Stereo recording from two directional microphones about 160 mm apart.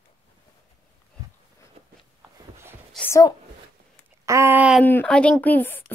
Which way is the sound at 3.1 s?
20° left (ahead or behind).